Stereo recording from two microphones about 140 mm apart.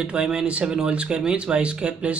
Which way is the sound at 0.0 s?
5° right (ahead or behind).